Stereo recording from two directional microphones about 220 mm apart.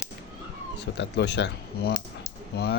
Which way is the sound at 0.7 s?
50° left (ahead or behind).